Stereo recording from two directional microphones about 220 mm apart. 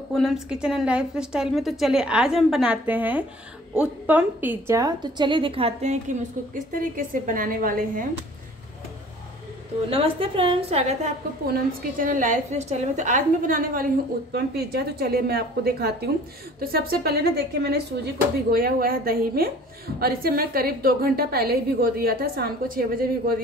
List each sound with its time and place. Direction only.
0.1 s a woman's voice: centre (ahead or behind); by 8.1 s 40° right (ahead or behind)
9.8 s a woman's voice: 25° right (ahead or behind)
11.8 s a woman's voice: 40° right (ahead or behind)